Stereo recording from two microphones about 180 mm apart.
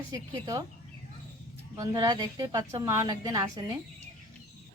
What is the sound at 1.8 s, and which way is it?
A woman's voice, 20° right (ahead or behind).